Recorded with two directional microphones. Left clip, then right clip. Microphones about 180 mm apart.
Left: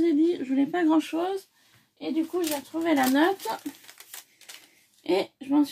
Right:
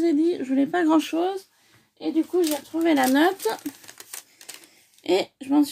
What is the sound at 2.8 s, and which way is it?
Speech, 60° right (ahead or behind).